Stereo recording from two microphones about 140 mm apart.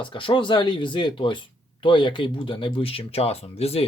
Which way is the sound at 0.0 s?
35° left (ahead or behind).